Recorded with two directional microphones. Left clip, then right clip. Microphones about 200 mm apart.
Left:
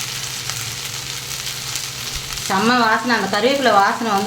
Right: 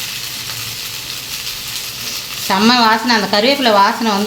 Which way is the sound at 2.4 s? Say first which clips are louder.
Right 4 dB; 35° right (ahead or behind).